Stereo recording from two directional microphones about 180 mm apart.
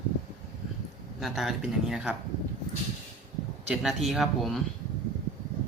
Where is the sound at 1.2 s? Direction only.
Centre (ahead or behind).